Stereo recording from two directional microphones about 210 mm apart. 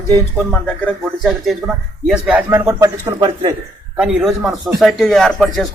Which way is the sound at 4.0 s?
5° right (ahead or behind).